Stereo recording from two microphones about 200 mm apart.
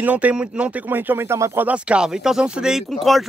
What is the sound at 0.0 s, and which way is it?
Speech, 5° right (ahead or behind).